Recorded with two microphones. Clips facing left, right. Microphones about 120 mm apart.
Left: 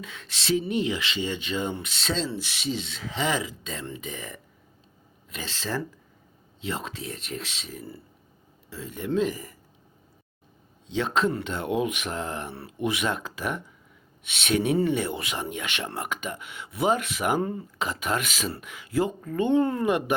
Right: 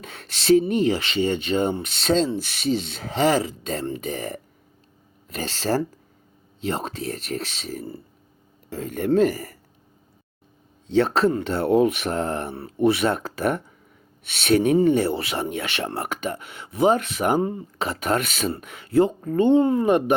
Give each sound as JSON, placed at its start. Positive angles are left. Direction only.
{"t": 0.0, "sound": "speech", "side_deg": -55}
{"t": 6.7, "sound": "speech", "side_deg": -50}
{"t": 10.8, "sound": "speech", "side_deg": -40}
{"t": 17.8, "sound": "speech", "side_deg": -40}
{"t": 19.5, "sound": "speech", "side_deg": -25}
{"t": 19.8, "sound": "speech", "side_deg": -35}